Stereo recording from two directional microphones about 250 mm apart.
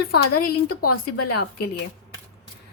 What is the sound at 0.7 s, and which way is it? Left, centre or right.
Speech, left.